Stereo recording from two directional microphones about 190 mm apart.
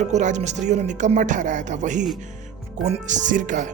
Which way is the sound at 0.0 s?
40° right (ahead or behind).